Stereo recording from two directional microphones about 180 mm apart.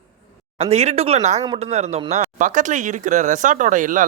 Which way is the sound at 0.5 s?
35° right (ahead or behind).